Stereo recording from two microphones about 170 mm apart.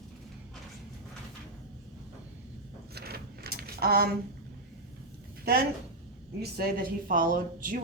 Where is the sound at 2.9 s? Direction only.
65° right (ahead or behind).